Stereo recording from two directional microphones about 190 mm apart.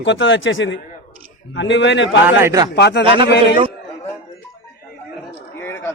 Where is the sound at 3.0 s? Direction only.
25° right (ahead or behind).